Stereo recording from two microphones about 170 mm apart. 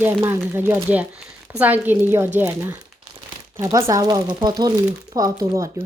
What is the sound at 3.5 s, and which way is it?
Speech, 20° right (ahead or behind).